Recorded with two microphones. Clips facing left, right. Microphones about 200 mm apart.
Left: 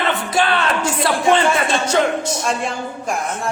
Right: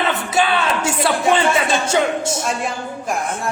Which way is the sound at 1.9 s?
25° right (ahead or behind).